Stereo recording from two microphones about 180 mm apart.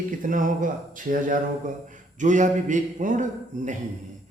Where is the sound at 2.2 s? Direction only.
45° right (ahead or behind).